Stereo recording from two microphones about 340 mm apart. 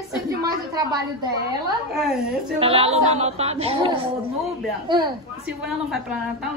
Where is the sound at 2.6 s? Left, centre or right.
Centre.